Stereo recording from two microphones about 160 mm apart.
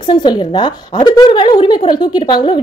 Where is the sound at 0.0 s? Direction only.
30° left (ahead or behind).